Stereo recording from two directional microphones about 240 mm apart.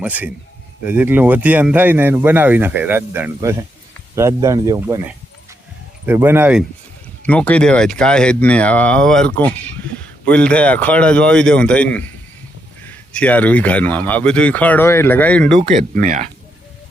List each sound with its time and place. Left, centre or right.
0.0 s speech: centre
7.2 s speech: centre
15.7 s speech: right